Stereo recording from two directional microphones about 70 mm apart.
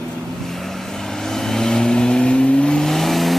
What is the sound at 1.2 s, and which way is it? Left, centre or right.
Vehicle, centre.